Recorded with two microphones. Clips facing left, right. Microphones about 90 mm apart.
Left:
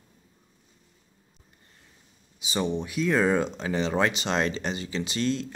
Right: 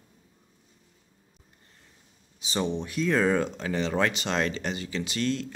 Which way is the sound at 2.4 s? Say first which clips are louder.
Left 1 dB; 5° left (ahead or behind).